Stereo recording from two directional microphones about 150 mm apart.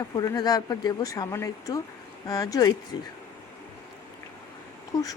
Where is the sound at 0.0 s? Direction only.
25° left (ahead or behind).